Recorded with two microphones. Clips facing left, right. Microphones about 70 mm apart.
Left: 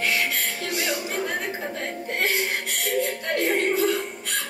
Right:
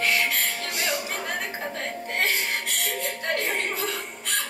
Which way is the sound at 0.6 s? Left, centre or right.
Right.